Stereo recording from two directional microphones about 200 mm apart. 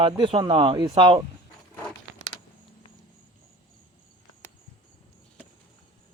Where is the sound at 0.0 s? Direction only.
25° right (ahead or behind).